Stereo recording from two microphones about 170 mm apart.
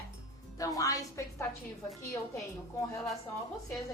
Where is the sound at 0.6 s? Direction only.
20° left (ahead or behind).